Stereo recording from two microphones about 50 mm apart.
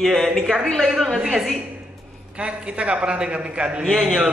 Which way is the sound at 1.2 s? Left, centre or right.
Centre.